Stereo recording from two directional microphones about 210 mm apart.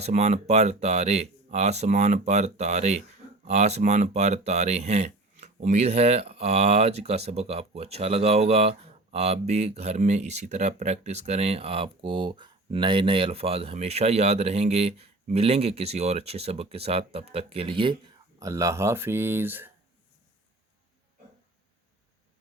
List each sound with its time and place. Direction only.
0.0 s speech: 35° right (ahead or behind); by 19.7 s 10° right (ahead or behind)